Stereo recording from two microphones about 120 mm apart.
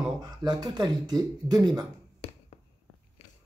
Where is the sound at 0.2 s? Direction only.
35° right (ahead or behind).